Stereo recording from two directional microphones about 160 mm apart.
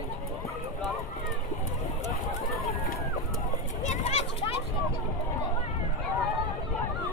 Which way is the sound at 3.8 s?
50° left (ahead or behind).